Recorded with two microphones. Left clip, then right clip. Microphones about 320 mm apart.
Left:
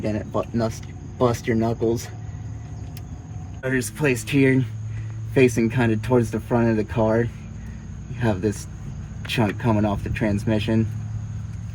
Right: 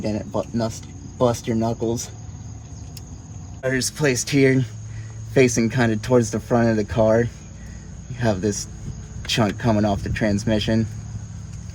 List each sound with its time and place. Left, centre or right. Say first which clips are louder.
0.0 s speech: even; right
3.6 s speech: right 2 dB; right